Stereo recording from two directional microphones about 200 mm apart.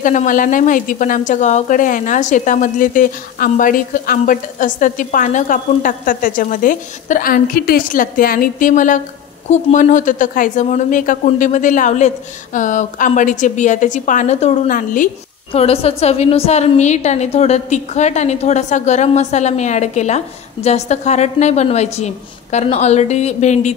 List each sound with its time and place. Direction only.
0.0 s a woman's voice: 40° left (ahead or behind)
15.5 s a woman's voice: 30° left (ahead or behind)